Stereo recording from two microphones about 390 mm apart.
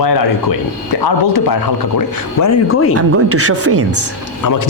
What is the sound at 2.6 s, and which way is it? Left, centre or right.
Speech, left.